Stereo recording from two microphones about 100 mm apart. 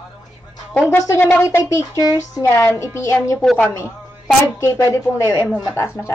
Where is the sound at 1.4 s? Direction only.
30° left (ahead or behind).